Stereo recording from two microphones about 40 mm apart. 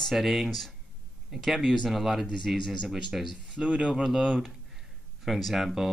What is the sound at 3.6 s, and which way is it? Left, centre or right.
Speech, right.